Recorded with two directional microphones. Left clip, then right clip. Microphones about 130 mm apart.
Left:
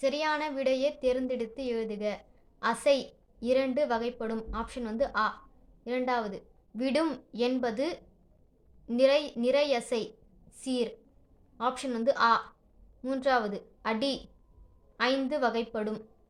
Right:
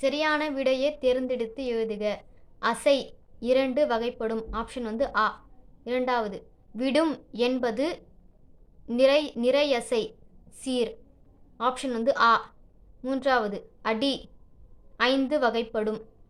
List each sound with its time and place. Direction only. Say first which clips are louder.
0.0 s a woman's voice: right 4 dB; 25° right (ahead or behind)